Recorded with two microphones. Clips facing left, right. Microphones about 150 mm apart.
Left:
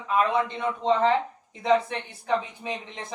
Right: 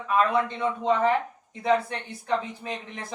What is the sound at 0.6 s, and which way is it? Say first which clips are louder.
Speech: right 1 dB; 20° right (ahead or behind).